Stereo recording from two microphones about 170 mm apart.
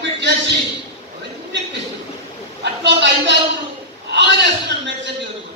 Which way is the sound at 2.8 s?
90° right.